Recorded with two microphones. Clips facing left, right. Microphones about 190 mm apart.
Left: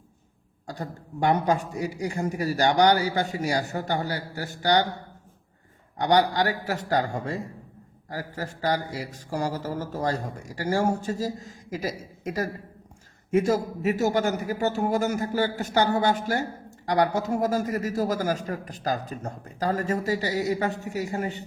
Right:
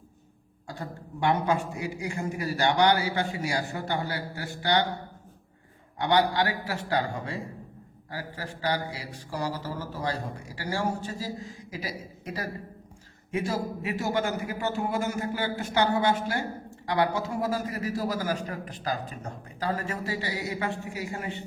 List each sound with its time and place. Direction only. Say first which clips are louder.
0.8 s a man's voice: left 3 dB; 40° left (ahead or behind)
6.0 s a man's voice: left 2 dB; 40° left (ahead or behind)
8.1 s a sound: left 4 dB; 45° left (ahead or behind)
13.3 s a man's voice: left 7 dB; 45° left (ahead or behind)